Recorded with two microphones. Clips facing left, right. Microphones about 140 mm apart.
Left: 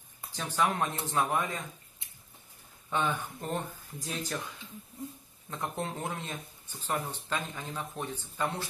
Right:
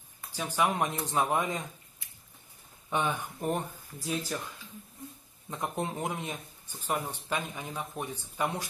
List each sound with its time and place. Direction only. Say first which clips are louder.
0.3 s speech: right 1 dB; 10° right (ahead or behind)
2.9 s speech: even; 15° right (ahead or behind)
4.1 s speech: right 3 dB; centre (ahead or behind)
5.5 s speech: right 2 dB; 15° right (ahead or behind)